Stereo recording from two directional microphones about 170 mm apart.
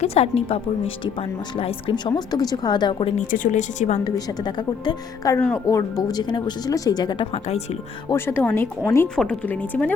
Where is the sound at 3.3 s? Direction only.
50° left (ahead or behind).